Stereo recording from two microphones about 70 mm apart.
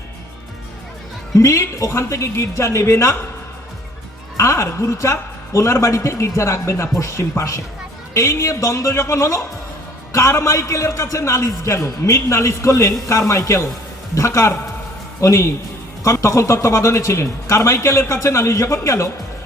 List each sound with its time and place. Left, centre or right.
1.4 s speech: left
4.4 s speech: left